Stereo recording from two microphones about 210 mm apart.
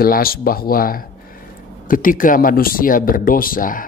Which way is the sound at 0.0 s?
45° left (ahead or behind).